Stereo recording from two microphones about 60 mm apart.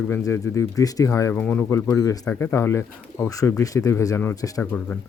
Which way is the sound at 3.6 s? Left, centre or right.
Left.